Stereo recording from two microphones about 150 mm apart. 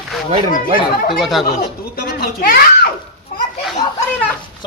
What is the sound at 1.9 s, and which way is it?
Speech, 85° left.